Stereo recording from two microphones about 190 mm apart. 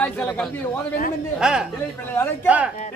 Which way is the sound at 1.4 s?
5° right (ahead or behind).